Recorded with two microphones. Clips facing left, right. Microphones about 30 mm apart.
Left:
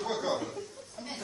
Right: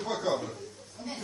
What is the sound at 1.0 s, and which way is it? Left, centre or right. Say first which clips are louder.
Chuckle: right 2 dB; left.